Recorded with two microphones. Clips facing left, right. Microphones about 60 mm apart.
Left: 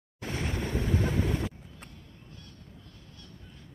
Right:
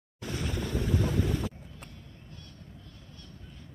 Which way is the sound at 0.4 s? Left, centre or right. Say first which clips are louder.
Left 1 dB; left.